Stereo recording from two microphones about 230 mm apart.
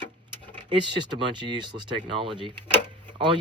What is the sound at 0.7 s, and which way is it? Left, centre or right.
Speech, centre.